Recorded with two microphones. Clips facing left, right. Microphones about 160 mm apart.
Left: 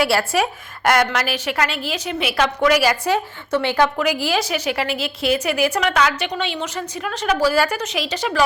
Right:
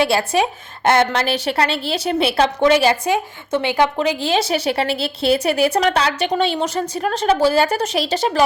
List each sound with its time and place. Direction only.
0.0 s a woman's voice: 20° right (ahead or behind)